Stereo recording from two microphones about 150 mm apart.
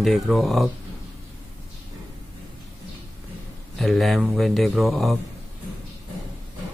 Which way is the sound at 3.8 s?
Centre (ahead or behind).